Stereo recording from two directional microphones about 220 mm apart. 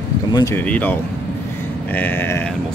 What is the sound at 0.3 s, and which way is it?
Speech, 15° left (ahead or behind).